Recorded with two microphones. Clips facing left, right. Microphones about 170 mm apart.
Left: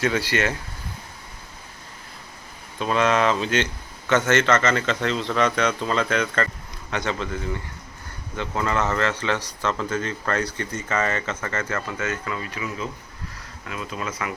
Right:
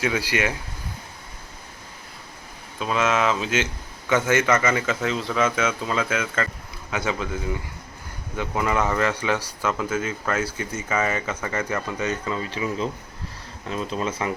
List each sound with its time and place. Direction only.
0.0 s speech: 10° right (ahead or behind)
2.7 s speech: 5° right (ahead or behind)
8.4 s speech: 10° right (ahead or behind); by 14.3 s 30° right (ahead or behind)